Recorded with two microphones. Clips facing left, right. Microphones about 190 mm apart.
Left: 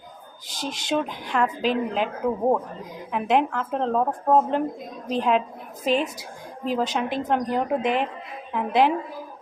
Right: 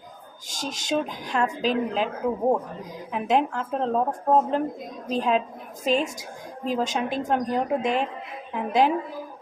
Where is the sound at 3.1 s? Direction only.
35° right (ahead or behind).